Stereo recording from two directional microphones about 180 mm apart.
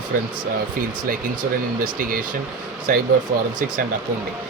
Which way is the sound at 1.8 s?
50° right (ahead or behind).